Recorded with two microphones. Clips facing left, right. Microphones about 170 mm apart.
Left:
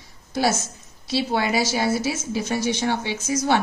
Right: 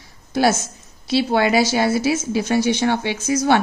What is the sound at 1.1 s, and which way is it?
Speech, 70° right (ahead or behind).